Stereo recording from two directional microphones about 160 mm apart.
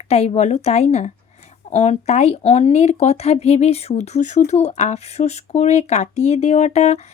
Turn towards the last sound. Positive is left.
turn(degrees=45)  # may be behind; listen again after turning